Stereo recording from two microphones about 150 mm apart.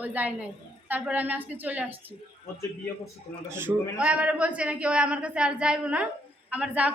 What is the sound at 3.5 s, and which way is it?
A woman's voice, 15° right (ahead or behind).